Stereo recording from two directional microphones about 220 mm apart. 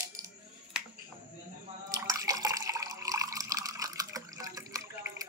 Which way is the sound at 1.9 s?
15° right (ahead or behind).